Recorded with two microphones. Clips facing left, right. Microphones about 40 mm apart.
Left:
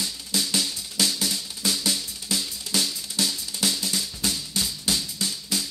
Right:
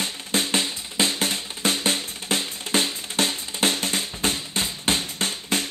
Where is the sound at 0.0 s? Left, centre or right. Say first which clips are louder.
Right 3 dB; right.